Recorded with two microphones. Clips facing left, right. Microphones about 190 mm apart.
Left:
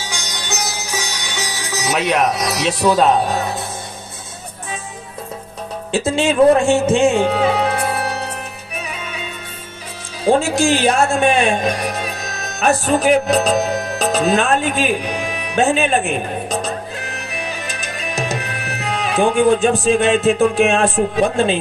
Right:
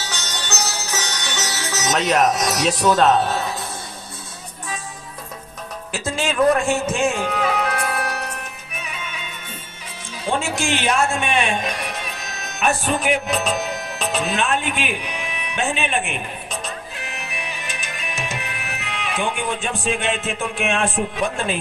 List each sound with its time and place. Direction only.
0.0 s music: 10° left (ahead or behind)
5.9 s a man's voice: 25° left (ahead or behind)
10.2 s speech: 35° left (ahead or behind)